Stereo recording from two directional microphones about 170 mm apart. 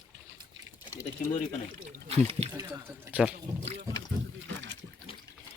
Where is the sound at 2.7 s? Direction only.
10° right (ahead or behind).